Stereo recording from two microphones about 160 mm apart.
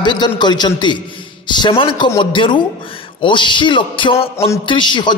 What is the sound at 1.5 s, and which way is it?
Music, 30° left (ahead or behind).